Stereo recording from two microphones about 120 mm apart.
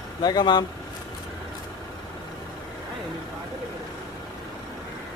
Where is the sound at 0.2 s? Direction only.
35° left (ahead or behind).